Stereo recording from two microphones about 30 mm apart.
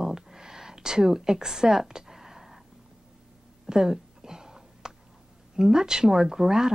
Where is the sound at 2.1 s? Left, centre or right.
Centre.